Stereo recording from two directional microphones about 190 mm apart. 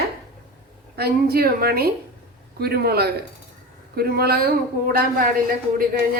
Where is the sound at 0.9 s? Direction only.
55° right (ahead or behind).